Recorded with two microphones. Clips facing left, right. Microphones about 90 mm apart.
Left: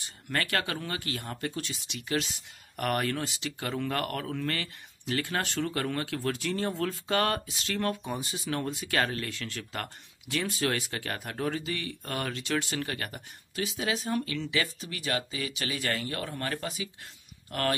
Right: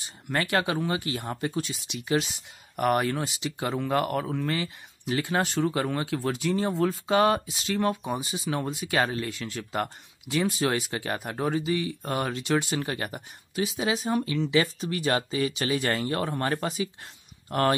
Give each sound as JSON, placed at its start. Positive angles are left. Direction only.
{"t": 0.3, "sound": "speech", "side_deg": -20}